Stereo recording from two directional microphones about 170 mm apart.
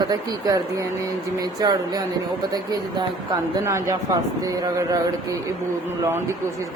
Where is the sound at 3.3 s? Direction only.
15° right (ahead or behind).